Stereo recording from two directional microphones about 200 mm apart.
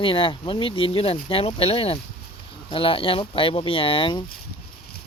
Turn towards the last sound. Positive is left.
turn(degrees=25)  # may be behind; listen again after turning